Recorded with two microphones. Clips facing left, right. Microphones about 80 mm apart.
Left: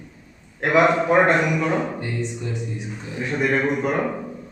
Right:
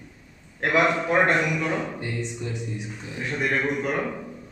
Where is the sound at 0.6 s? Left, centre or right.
Centre.